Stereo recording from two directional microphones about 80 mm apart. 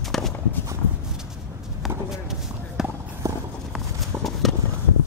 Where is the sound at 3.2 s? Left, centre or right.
Right.